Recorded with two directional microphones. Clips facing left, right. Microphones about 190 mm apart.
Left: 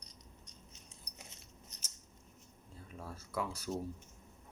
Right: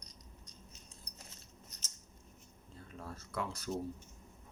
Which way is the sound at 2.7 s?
5° left (ahead or behind).